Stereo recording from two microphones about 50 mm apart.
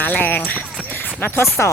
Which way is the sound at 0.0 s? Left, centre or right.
Left.